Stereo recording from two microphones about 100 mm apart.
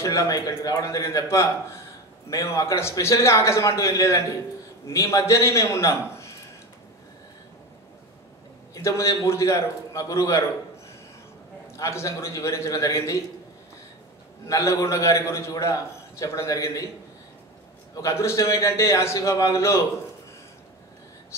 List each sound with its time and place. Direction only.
0.0 s a man's voice: 30° left (ahead or behind)
8.7 s a man's voice: 30° left (ahead or behind)
11.6 s a man's voice: 30° left (ahead or behind)
14.5 s a man's voice: 30° left (ahead or behind)
17.9 s a man's voice: 30° left (ahead or behind)